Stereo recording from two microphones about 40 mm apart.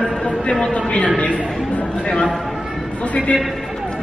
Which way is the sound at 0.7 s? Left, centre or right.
Left.